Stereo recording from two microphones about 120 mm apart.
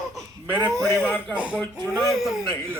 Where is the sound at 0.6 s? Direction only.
30° right (ahead or behind).